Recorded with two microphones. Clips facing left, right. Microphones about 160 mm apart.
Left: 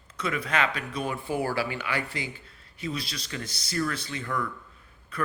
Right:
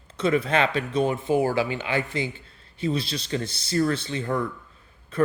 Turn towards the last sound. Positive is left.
turn(degrees=-25)  # may be behind; listen again after turning